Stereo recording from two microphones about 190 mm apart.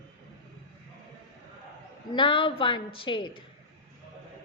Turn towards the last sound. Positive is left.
turn(degrees=25)  # may be behind; listen again after turning